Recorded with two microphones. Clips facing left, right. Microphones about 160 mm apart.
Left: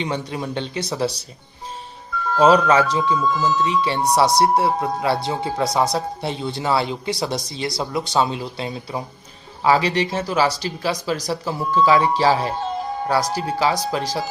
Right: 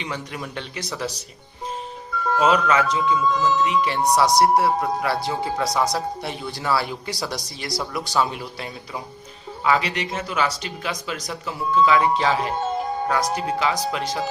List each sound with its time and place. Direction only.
0.0 s speech: 30° left (ahead or behind)
2.4 s speech: 35° left (ahead or behind)
3.0 s speech: centre (ahead or behind)
3.7 s speech: 30° left (ahead or behind)